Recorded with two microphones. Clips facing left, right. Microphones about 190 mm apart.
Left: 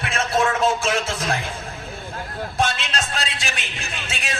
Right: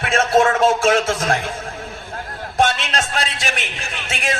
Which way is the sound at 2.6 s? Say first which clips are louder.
Right 5 dB; 45° right (ahead or behind).